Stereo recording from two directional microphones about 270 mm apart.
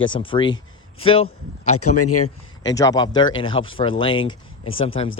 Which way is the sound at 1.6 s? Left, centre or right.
Left.